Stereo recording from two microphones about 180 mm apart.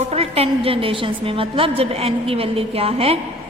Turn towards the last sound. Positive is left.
turn(degrees=-35)  # may be behind; listen again after turning